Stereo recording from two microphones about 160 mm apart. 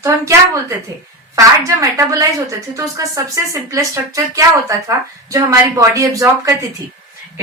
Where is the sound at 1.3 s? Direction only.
20° right (ahead or behind).